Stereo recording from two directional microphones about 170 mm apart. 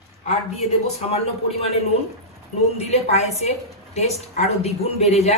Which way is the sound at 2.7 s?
40° left (ahead or behind).